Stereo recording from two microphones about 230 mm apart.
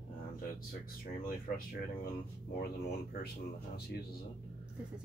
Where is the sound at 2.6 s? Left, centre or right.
Left.